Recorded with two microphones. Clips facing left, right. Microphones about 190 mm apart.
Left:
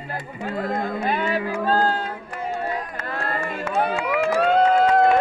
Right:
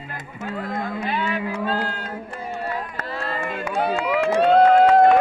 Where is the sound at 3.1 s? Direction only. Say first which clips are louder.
Left 1 dB; 55° left (ahead or behind).